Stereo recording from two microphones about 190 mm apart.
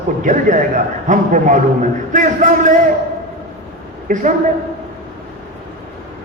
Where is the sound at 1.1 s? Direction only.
40° right (ahead or behind).